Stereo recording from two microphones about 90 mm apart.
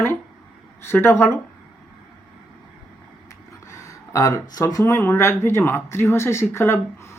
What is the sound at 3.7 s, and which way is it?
Speech, 35° left (ahead or behind).